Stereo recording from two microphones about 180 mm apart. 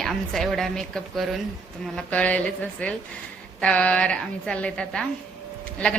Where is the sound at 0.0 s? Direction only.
Centre (ahead or behind).